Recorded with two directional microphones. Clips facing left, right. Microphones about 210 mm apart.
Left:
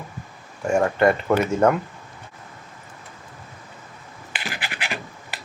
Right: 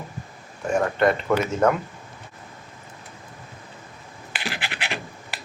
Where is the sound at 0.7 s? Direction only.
10° left (ahead or behind).